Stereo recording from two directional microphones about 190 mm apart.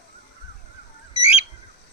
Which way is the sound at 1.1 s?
30° left (ahead or behind).